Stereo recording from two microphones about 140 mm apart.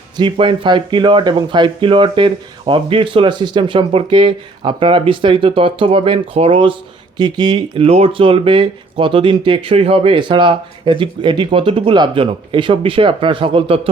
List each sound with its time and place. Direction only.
0.2 s speech: 40° right (ahead or behind)